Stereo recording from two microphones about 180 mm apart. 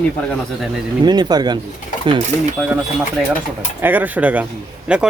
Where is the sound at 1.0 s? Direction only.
25° right (ahead or behind).